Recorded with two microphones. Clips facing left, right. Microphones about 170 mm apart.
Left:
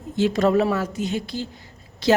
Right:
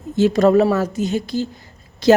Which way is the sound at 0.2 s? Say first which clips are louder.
Right 5 dB; 40° right (ahead or behind).